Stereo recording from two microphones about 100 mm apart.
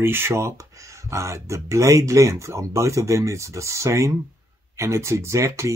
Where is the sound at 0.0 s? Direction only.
25° right (ahead or behind).